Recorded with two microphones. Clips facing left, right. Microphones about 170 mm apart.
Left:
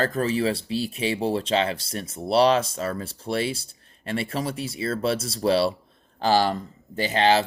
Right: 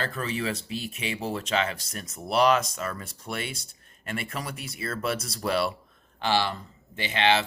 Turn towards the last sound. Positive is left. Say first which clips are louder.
# left 4 dB
turn(degrees=40)  # may be behind; listen again after turning